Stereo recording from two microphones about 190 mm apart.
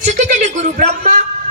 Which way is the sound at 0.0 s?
35° right (ahead or behind).